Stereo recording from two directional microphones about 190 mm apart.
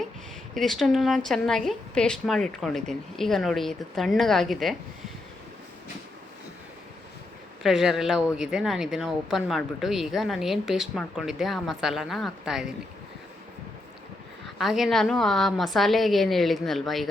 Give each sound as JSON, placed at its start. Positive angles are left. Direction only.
{"t": 0.5, "sound": "speech", "side_deg": 0}
{"t": 7.6, "sound": "speech", "side_deg": 0}
{"t": 14.6, "sound": "speech", "side_deg": 0}